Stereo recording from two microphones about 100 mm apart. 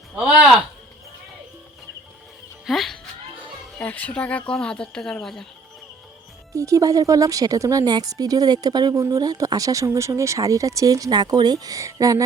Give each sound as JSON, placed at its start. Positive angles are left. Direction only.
{"t": 2.6, "sound": "speech", "side_deg": 0}
{"t": 3.8, "sound": "speech", "side_deg": 15}
{"t": 6.5, "sound": "speech", "side_deg": -35}